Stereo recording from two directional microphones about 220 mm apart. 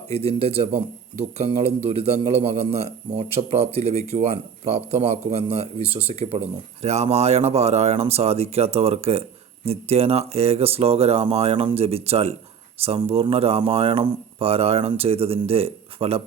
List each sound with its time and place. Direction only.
0.1 s speech: 25° right (ahead or behind)